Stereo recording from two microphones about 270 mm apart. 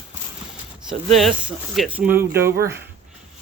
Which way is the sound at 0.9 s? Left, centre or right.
Centre.